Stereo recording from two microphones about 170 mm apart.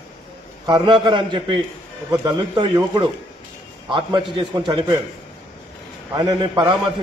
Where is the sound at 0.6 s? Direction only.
25° right (ahead or behind).